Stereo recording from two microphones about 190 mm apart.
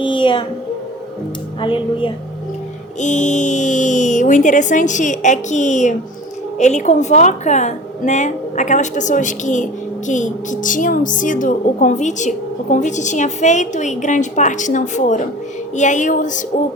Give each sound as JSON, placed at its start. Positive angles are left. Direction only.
{"t": 0.0, "sound": "music", "side_deg": 25}
{"t": 1.6, "sound": "speech", "side_deg": 25}
{"t": 3.0, "sound": "a woman's voice", "side_deg": 40}